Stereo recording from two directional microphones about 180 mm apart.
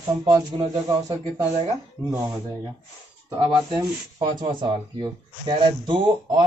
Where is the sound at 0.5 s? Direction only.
30° right (ahead or behind).